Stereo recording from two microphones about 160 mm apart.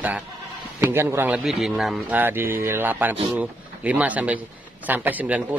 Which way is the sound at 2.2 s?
15° right (ahead or behind).